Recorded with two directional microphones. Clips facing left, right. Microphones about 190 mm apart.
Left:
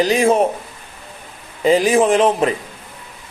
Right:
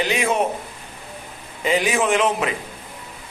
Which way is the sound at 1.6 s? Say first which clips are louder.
Left 7 dB; 35° left (ahead or behind).